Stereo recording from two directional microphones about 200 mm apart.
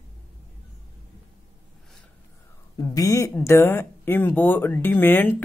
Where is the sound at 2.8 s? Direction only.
15° left (ahead or behind).